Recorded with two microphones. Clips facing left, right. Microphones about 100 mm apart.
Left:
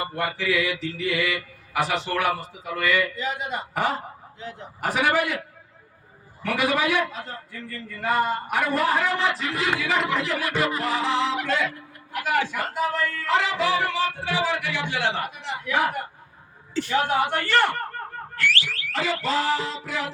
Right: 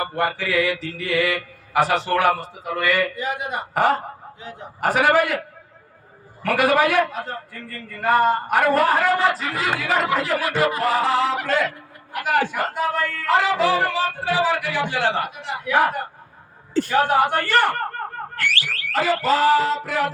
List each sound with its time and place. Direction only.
0.0 s a man's voice: 40° right (ahead or behind)
3.2 s a man's voice: 50° right (ahead or behind)
6.4 s a man's voice: 45° right (ahead or behind)